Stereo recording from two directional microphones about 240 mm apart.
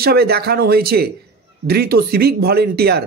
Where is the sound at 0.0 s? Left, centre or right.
Right.